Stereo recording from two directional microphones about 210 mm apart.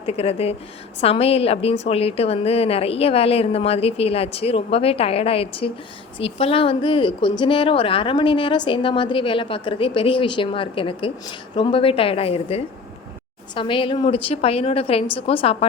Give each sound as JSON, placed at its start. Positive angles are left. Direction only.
{"t": 0.0, "sound": "speech", "side_deg": 30}